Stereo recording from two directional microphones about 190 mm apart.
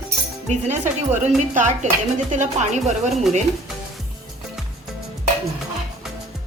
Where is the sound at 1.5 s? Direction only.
40° right (ahead or behind).